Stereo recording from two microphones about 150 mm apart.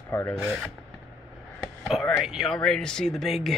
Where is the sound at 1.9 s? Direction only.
Centre (ahead or behind).